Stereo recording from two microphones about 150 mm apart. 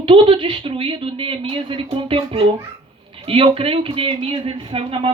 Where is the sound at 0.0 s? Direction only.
35° right (ahead or behind).